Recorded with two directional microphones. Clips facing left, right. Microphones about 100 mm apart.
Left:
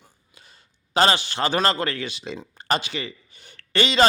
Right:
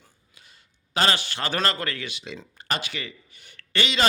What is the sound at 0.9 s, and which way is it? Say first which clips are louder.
A man's voice: left 5 dB; 25° left (ahead or behind).